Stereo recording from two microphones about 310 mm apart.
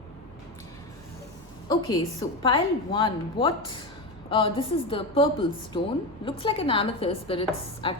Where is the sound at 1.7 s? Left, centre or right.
Centre.